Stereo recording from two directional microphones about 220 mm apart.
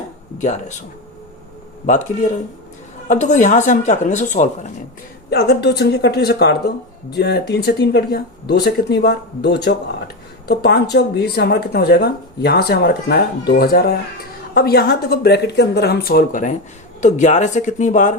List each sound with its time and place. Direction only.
3.1 s speech: 35° left (ahead or behind)
5.3 s speech: 50° left (ahead or behind)